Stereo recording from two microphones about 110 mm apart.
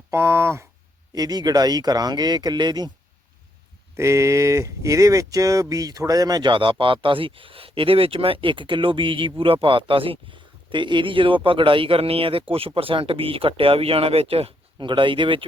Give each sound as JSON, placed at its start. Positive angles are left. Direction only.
{"t": 0.1, "sound": "speech", "side_deg": -25}
{"t": 1.1, "sound": "speech", "side_deg": -35}
{"t": 3.9, "sound": "speech", "side_deg": -25}
{"t": 14.8, "sound": "speech", "side_deg": -45}